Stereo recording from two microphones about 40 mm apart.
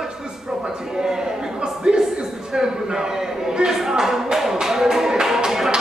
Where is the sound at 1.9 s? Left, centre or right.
Right.